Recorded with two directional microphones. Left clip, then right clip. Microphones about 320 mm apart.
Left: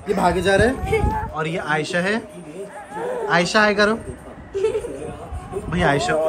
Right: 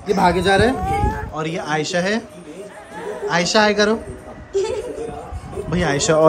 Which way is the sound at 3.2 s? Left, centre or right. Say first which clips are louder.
Right 1 dB; centre.